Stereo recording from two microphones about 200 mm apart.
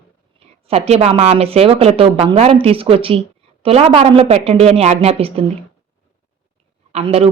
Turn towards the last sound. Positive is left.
turn(degrees=-30)  # may be behind; listen again after turning